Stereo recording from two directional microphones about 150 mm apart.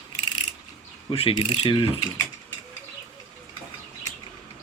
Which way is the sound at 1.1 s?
35° left (ahead or behind).